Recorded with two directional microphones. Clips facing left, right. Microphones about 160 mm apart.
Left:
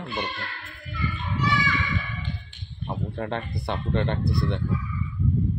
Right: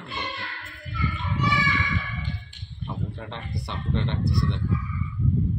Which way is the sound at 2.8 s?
55° left (ahead or behind).